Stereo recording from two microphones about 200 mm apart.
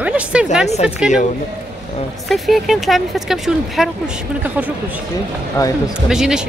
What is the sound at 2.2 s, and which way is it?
Speech, centre (ahead or behind).